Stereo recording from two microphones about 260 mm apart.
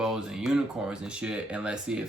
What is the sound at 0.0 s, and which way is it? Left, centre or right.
Speech, centre.